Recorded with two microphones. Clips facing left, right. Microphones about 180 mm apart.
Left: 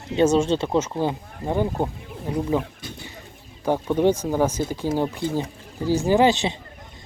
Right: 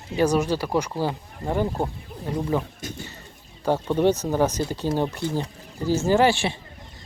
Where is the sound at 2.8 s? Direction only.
45° right (ahead or behind).